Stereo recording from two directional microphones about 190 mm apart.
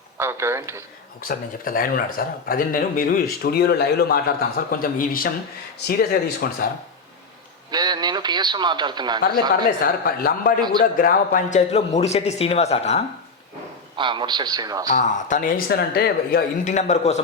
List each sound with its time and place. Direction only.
0.2 s a man's voice: 15° right (ahead or behind)
1.3 s speech: 50° left (ahead or behind)
7.7 s speech: 20° right (ahead or behind)
9.8 s a man's voice: 50° left (ahead or behind); by 13.1 s 35° left (ahead or behind)
13.9 s speech: 25° right (ahead or behind)
14.9 s speech: 40° left (ahead or behind)